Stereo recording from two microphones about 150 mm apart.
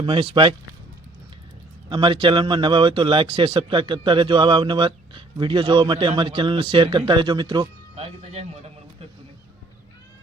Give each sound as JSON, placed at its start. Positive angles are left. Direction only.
{"t": 0.0, "sound": "speech", "side_deg": -35}
{"t": 1.9, "sound": "speech", "side_deg": -35}
{"t": 7.9, "sound": "speech", "side_deg": -45}